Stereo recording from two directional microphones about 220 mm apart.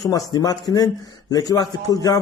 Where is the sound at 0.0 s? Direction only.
15° left (ahead or behind).